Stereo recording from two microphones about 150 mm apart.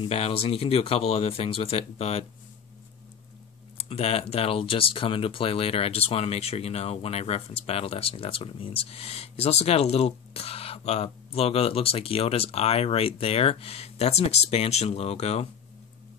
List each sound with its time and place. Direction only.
0.0 s speech: 40° left (ahead or behind)
3.7 s speech: 40° left (ahead or behind)